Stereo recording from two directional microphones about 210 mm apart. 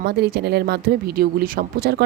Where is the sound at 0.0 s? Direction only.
50° right (ahead or behind).